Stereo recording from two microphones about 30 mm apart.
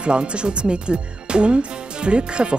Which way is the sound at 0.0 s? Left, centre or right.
Right.